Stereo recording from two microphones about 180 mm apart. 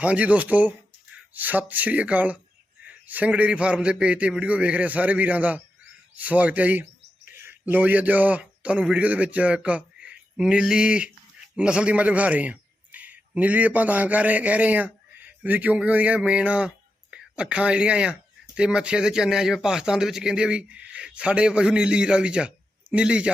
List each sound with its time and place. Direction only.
0.0 s a man's voice: 5° right (ahead or behind)